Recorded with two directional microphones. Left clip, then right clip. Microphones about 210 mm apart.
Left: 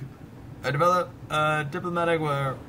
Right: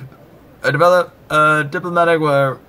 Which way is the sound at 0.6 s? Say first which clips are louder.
Right 10 dB; 10° right (ahead or behind).